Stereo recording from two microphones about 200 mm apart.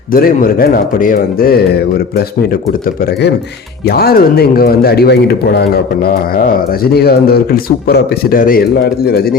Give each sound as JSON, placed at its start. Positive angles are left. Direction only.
{"t": 0.1, "sound": "speech", "side_deg": 45}